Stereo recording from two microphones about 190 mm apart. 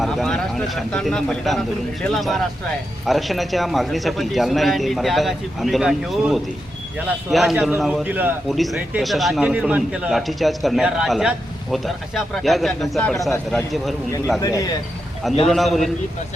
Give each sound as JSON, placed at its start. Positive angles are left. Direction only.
{"t": 0.0, "sound": "a man's voice", "side_deg": 0}
{"t": 14.3, "sound": "a man's voice", "side_deg": 20}
{"t": 15.4, "sound": "a man's voice", "side_deg": 0}